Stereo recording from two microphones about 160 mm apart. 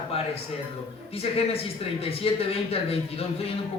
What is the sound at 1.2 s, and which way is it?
Speech, 40° left (ahead or behind).